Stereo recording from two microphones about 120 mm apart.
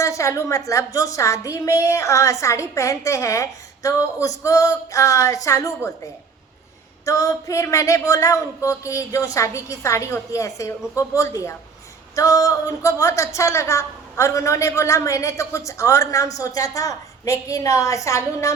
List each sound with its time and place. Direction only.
0.0 s a woman's voice: 25° left (ahead or behind)
7.0 s a woman's voice: 30° left (ahead or behind)